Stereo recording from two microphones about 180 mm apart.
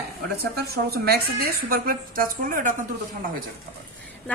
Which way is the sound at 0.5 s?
60° right (ahead or behind).